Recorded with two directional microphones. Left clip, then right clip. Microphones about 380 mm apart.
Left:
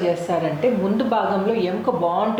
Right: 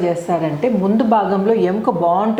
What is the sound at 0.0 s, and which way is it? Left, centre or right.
A woman's voice, right.